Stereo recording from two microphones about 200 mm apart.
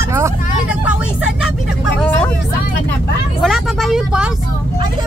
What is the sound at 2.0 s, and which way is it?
Vehicle, 10° left (ahead or behind).